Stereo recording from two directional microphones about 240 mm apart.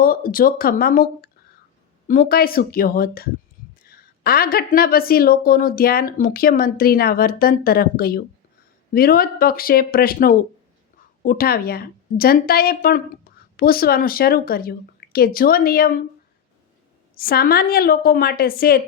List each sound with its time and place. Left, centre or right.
0.0 s a woman's voice: left
17.2 s a woman's voice: left